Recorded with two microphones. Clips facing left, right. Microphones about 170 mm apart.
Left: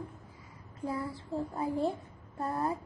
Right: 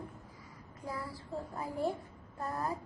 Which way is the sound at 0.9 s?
25° left (ahead or behind).